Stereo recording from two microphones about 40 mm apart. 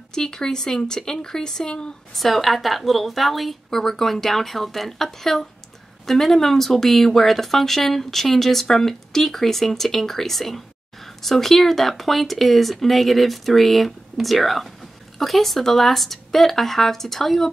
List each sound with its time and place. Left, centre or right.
0.1 s speech: centre
2.1 s speech: centre